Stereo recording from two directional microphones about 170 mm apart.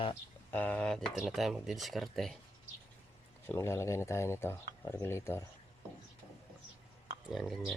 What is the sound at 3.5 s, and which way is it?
Speech, 15° left (ahead or behind).